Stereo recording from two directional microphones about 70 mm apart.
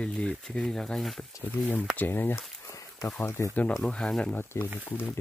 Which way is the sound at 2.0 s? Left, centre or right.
Left.